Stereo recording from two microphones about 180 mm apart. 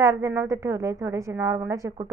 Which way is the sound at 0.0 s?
15° right (ahead or behind).